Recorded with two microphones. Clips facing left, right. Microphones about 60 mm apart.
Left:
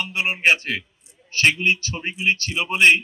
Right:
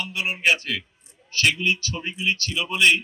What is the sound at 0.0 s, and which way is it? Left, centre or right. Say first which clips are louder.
A man's voice: left 3 dB; left.